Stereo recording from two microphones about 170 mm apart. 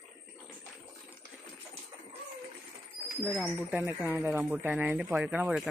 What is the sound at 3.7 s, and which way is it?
Speech, 10° right (ahead or behind).